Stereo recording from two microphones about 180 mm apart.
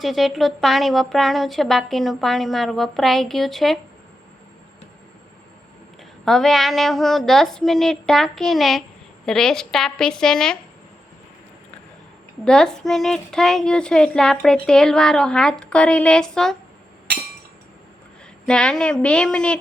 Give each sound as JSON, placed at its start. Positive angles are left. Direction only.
{"t": 0.0, "sound": "speech", "side_deg": 0}
{"t": 6.2, "sound": "speech", "side_deg": 0}
{"t": 12.5, "sound": "speech", "side_deg": 5}
{"t": 18.4, "sound": "speech", "side_deg": 5}